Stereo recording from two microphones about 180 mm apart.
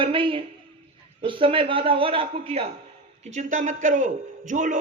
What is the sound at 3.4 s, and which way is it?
A man's voice, 45° right (ahead or behind).